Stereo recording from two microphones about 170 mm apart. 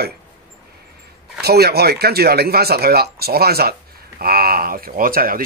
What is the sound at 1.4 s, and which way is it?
A man's voice, 70° right (ahead or behind).